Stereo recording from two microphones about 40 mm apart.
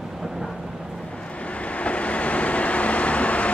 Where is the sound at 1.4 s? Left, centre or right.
Left.